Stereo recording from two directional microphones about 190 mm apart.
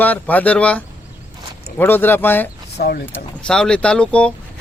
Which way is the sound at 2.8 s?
55° left (ahead or behind).